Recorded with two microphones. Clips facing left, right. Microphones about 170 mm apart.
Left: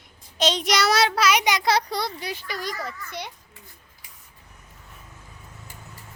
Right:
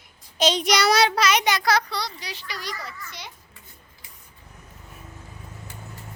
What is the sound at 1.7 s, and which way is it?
A child's voice, 40° left (ahead or behind).